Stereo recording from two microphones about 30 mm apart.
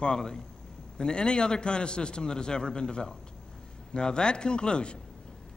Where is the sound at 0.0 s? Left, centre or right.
Left.